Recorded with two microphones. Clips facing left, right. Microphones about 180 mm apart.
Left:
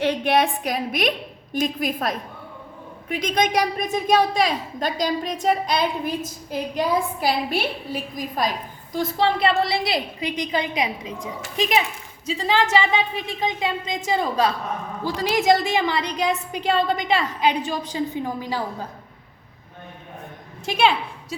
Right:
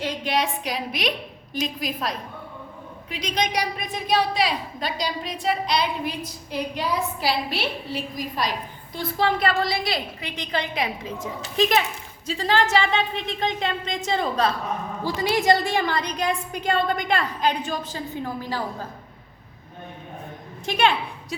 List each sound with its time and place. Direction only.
0.0 s a woman's voice: 60° left (ahead or behind)
9.1 s a woman's voice: 30° left (ahead or behind); by 16.4 s 5° left (ahead or behind)
17.0 s a woman's voice: 50° right (ahead or behind)
17.8 s a woman's voice: 15° left (ahead or behind)
20.7 s a woman's voice: 5° left (ahead or behind)